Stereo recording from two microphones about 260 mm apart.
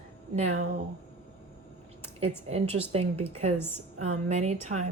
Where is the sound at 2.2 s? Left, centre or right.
Right.